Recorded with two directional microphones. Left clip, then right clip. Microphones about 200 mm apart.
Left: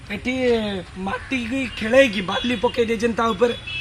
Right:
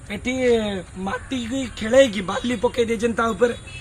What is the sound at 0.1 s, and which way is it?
A man's voice, 5° left (ahead or behind).